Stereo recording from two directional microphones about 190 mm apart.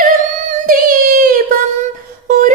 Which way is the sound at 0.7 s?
50° right (ahead or behind).